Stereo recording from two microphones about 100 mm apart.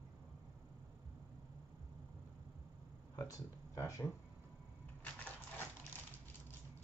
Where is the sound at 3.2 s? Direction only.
35° left (ahead or behind).